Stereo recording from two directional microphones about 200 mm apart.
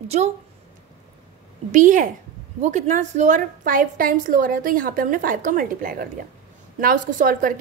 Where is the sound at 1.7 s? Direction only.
40° right (ahead or behind).